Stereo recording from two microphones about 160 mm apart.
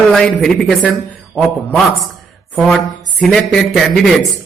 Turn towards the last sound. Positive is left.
turn(degrees=0)  # may be behind; listen again after turning